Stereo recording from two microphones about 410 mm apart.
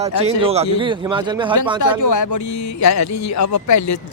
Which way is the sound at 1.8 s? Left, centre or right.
Left.